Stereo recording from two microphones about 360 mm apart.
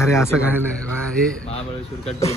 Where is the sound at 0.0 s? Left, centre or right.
Centre.